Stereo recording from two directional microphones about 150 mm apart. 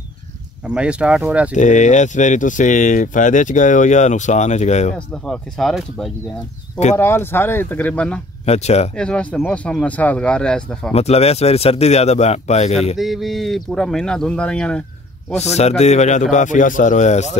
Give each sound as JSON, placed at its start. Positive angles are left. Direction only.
{"t": 0.7, "sound": "speech", "side_deg": -5}
{"t": 1.5, "sound": "speech", "side_deg": 55}
{"t": 4.9, "sound": "speech", "side_deg": 5}
{"t": 7.0, "sound": "speech", "side_deg": 15}
{"t": 8.5, "sound": "a man's voice", "side_deg": 45}
{"t": 8.9, "sound": "speech", "side_deg": 5}
{"t": 10.9, "sound": "a man's voice", "side_deg": 45}
{"t": 12.9, "sound": "speech", "side_deg": 0}
{"t": 15.3, "sound": "a man's voice", "side_deg": 45}